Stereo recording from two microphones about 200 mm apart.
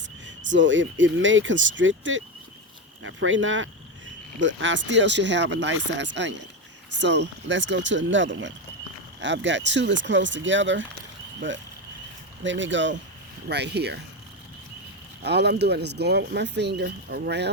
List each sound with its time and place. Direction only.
0.3 s speech: 65° right (ahead or behind)
15.2 s speech: 55° right (ahead or behind)